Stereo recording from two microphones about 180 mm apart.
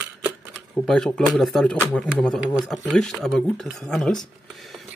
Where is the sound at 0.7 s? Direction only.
5° left (ahead or behind).